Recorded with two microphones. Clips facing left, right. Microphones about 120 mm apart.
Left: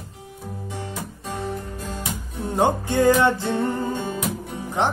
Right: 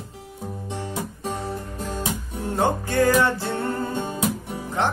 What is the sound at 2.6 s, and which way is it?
Music, 15° left (ahead or behind).